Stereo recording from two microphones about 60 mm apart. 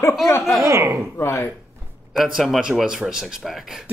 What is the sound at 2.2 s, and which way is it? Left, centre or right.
A man's voice, centre.